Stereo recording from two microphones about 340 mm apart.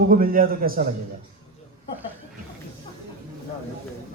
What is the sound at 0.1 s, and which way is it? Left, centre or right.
Speech, right.